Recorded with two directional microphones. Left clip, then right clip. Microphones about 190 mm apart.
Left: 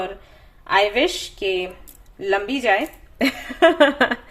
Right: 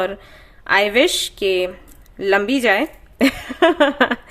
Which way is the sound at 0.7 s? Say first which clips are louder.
Right 3 dB; 40° right (ahead or behind).